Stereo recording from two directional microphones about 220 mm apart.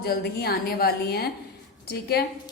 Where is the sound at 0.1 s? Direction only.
45° left (ahead or behind).